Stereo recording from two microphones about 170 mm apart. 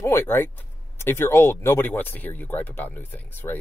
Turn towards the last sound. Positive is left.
turn(degrees=10)  # may be behind; listen again after turning